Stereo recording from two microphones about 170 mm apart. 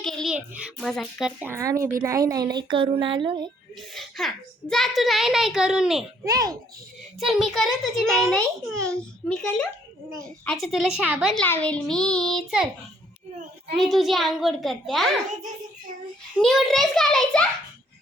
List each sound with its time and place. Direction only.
0.0 s child singing: centre (ahead or behind)
0.3 s a child's voice: 5° right (ahead or behind)
1.4 s speech: 15° right (ahead or behind)
3.8 s a child's voice: centre (ahead or behind)
6.2 s speech: 20° right (ahead or behind)
7.2 s a child's voice: centre (ahead or behind)
11.4 s a child's voice: 10° left (ahead or behind)
13.7 s a child's voice: centre (ahead or behind)
16.4 s a child's voice: centre (ahead or behind)